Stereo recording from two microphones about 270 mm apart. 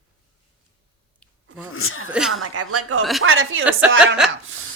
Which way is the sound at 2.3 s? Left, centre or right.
Right.